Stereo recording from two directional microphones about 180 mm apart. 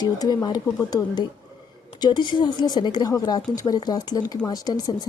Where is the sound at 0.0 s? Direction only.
20° left (ahead or behind).